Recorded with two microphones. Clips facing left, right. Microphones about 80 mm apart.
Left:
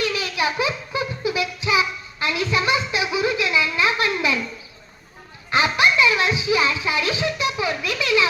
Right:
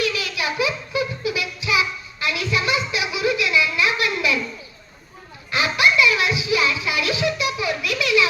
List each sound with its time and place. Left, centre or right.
0.0 s music: left
5.5 s music: left